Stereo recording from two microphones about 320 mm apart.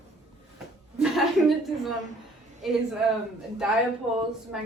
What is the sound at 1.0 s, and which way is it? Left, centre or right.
A woman's voice, centre.